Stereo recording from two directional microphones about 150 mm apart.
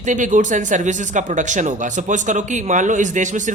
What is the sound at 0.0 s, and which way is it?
Speech, 55° right (ahead or behind).